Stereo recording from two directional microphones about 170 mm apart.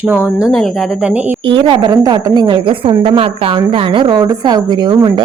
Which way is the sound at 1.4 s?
30° right (ahead or behind).